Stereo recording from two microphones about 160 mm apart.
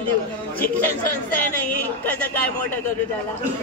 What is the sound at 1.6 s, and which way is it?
Speech, 10° left (ahead or behind).